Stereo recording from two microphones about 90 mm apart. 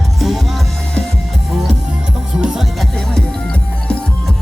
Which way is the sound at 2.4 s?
10° right (ahead or behind).